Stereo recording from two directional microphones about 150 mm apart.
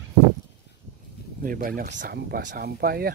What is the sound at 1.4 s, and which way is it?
Speech, 70° right (ahead or behind).